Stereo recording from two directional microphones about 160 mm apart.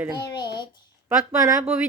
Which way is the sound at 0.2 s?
30° left (ahead or behind).